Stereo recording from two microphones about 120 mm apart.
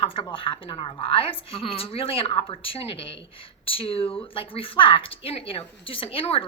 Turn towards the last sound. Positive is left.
turn(degrees=50)  # may be behind; listen again after turning